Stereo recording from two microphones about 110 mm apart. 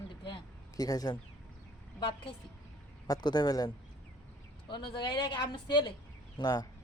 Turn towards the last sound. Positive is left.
turn(degrees=40)  # may be behind; listen again after turning